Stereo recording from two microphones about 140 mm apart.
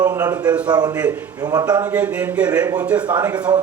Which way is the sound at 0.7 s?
25° right (ahead or behind).